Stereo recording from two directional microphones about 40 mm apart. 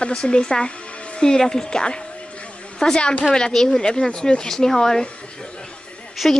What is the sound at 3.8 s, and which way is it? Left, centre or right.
Speech, left.